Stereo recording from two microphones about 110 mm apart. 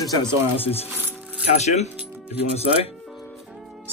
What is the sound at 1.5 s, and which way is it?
Speech, 90° left.